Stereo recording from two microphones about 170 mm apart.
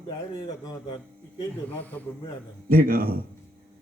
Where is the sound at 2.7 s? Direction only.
60° right (ahead or behind).